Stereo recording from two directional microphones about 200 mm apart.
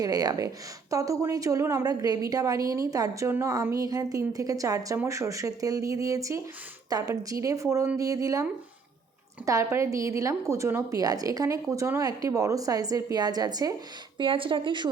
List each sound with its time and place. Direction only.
0.0 s a woman's voice: 20° right (ahead or behind)
9.5 s a woman's voice: 15° right (ahead or behind)